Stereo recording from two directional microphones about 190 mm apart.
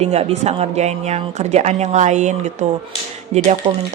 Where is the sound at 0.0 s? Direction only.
30° right (ahead or behind).